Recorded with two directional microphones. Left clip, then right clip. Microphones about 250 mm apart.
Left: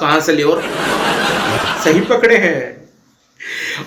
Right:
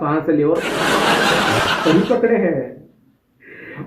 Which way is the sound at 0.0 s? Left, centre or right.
Left.